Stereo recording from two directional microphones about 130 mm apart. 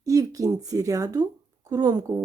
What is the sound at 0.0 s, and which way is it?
Speech, 25° right (ahead or behind).